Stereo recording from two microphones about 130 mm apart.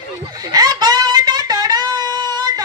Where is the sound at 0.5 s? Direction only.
30° right (ahead or behind).